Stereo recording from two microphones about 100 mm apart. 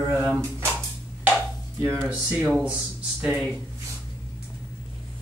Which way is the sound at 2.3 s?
10° right (ahead or behind).